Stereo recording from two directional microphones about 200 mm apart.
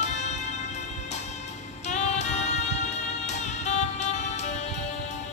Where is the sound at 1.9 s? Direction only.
35° left (ahead or behind).